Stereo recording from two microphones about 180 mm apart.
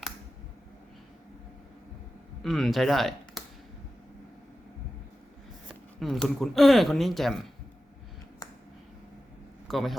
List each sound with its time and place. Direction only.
2.4 s speech: centre (ahead or behind)
5.6 s speech: centre (ahead or behind)
9.6 s speech: centre (ahead or behind)